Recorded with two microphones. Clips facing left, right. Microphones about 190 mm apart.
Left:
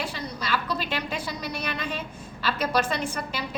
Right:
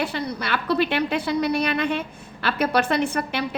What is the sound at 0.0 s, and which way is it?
A woman's voice, 65° right (ahead or behind).